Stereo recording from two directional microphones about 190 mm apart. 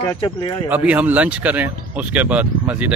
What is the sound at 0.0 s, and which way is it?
Speech, 25° left (ahead or behind).